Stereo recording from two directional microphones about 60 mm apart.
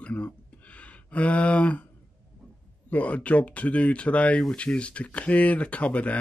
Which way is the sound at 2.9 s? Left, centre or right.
Left.